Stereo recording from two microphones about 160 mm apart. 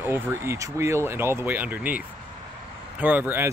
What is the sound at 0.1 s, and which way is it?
Speech, 15° right (ahead or behind).